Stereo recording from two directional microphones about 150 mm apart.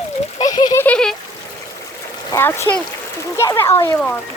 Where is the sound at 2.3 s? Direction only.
20° left (ahead or behind).